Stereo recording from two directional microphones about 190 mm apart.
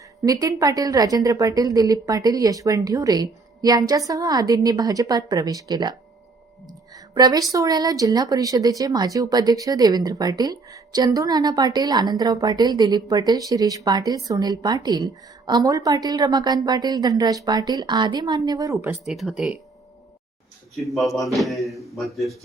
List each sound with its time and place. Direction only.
0.3 s speech: 20° right (ahead or behind)
6.7 s music: 20° right (ahead or behind)
7.5 s speech: 20° right (ahead or behind)
19.0 s speech: centre (ahead or behind)
20.7 s speech: centre (ahead or behind)